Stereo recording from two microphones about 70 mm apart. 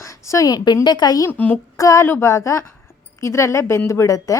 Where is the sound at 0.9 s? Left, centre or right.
Left.